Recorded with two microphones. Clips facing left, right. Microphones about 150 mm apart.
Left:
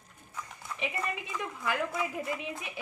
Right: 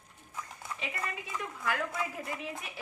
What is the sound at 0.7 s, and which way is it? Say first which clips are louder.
A woman's voice: left 4 dB; 20° left (ahead or behind).